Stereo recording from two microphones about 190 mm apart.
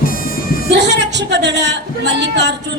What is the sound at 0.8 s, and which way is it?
A woman's voice, 65° right (ahead or behind).